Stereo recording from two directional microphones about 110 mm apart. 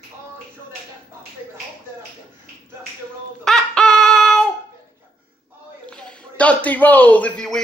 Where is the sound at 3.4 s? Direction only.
5° left (ahead or behind).